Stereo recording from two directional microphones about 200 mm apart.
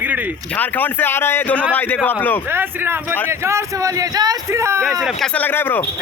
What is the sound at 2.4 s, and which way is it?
A man's voice, 10° right (ahead or behind).